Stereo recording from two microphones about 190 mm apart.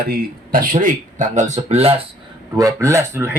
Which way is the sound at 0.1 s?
45° right (ahead or behind).